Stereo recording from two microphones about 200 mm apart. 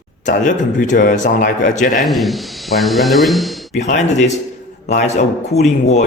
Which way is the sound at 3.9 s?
35° left (ahead or behind).